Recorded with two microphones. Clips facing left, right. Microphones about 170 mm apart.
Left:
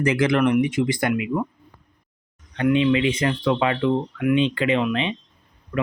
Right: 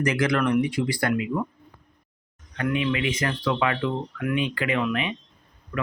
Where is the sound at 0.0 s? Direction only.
25° left (ahead or behind).